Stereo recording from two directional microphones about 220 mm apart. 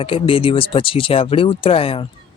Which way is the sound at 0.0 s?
25° left (ahead or behind).